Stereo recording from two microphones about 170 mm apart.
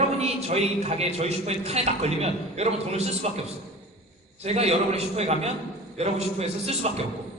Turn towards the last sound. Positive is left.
turn(degrees=-40)  # may be behind; listen again after turning